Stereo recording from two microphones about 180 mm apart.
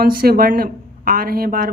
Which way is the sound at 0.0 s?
55° right (ahead or behind).